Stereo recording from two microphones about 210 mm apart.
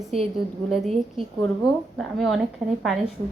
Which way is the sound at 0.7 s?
Centre (ahead or behind).